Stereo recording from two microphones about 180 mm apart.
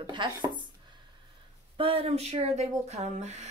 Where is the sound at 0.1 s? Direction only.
25° right (ahead or behind).